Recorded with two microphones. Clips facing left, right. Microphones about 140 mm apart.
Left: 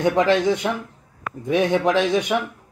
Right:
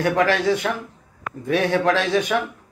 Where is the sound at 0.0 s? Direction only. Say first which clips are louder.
Left 1 dB; 20° left (ahead or behind).